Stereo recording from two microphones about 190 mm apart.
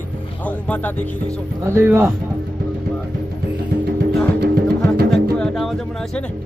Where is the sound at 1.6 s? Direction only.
15° right (ahead or behind).